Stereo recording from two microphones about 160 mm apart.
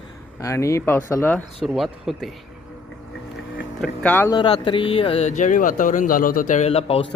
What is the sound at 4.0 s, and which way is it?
Speech, 10° left (ahead or behind).